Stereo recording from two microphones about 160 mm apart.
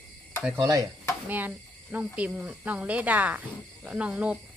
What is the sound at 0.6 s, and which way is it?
Stir, 20° right (ahead or behind).